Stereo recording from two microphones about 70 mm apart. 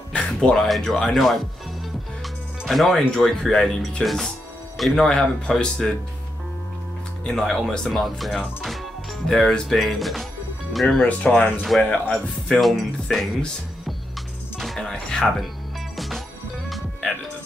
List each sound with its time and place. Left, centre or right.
0.2 s speech: centre
2.6 s speech: centre
7.2 s speech: centre
11.1 s speech: centre
12.4 s speech: centre
14.6 s music: centre
16.6 s music: centre